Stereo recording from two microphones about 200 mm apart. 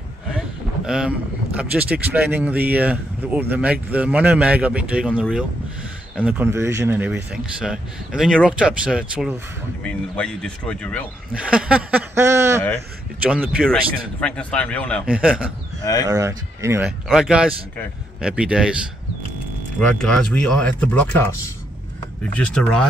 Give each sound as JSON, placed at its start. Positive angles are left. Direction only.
{"t": 0.8, "sound": "speech", "side_deg": -5}
{"t": 11.3, "sound": "speech", "side_deg": -5}
{"t": 14.2, "sound": "a man's voice", "side_deg": 5}
{"t": 15.0, "sound": "speech", "side_deg": -5}
{"t": 15.8, "sound": "a man's voice", "side_deg": 15}
{"t": 16.1, "sound": "speech", "side_deg": -15}
{"t": 20.0, "sound": "speech", "side_deg": 5}
{"t": 22.3, "sound": "speech", "side_deg": 5}